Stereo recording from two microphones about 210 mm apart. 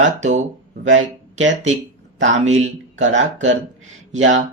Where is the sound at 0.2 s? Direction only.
35° right (ahead or behind).